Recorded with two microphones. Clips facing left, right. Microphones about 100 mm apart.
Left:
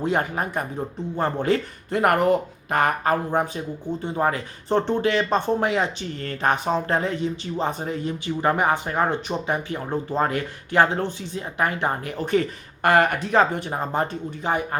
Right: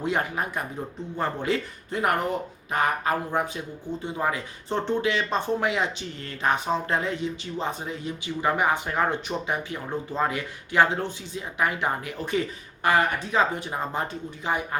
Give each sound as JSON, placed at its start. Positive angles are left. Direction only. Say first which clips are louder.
{"t": 0.0, "sound": "speech", "louder": "left 3 dB", "side_deg": 35}
{"t": 1.9, "sound": "speech", "louder": "left 6 dB", "side_deg": 60}
{"t": 5.5, "sound": "speech", "louder": "left 3 dB", "side_deg": 35}
{"t": 6.2, "sound": "speech", "louder": "left 3 dB", "side_deg": 50}
{"t": 8.9, "sound": "speech", "louder": "left 2 dB", "side_deg": 25}
{"t": 13.9, "sound": "speech", "louder": "left 5 dB", "side_deg": 45}